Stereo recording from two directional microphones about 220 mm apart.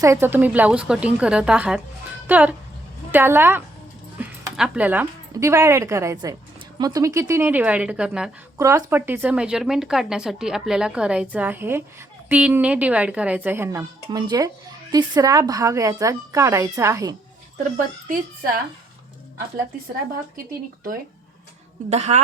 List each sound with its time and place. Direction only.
0.0 s a woman's voice: 10° right (ahead or behind)
8.5 s speech: 15° right (ahead or behind)
21.8 s a woman's voice: 30° right (ahead or behind)